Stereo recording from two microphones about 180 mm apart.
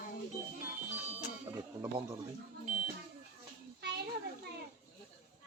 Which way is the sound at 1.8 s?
15° right (ahead or behind).